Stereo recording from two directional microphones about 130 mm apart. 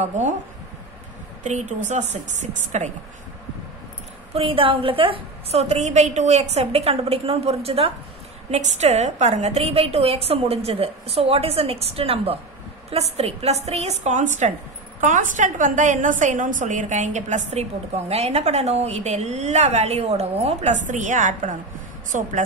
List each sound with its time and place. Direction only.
1.4 s a woman's voice: 65° right (ahead or behind)
4.3 s a woman's voice: 45° right (ahead or behind)
8.5 s a woman's voice: 65° right (ahead or behind)
15.0 s a woman's voice: 80° right